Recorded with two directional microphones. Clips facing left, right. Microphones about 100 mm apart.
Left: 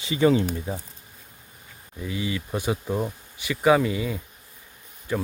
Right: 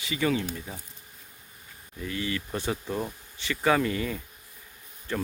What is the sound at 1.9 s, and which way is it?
Speech, 15° left (ahead or behind).